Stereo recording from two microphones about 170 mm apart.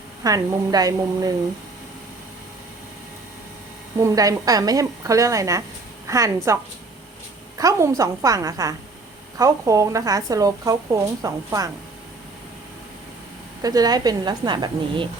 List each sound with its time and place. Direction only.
0.2 s a woman's voice: 20° right (ahead or behind)
4.0 s a woman's voice: 20° right (ahead or behind)
7.6 s a woman's voice: 20° right (ahead or behind)
13.6 s a woman's voice: 20° right (ahead or behind)